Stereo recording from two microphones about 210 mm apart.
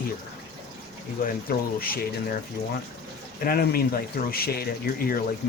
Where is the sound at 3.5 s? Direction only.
45° left (ahead or behind).